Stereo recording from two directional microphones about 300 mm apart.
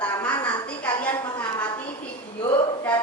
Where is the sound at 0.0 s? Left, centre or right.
Centre.